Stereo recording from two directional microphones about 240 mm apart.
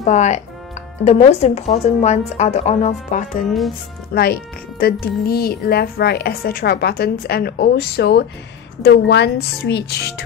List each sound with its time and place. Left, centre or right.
0.0 s speech: left
4.1 s speech: left